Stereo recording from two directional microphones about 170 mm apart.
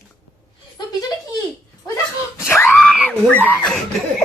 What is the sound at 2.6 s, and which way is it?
Screaming, 5° left (ahead or behind).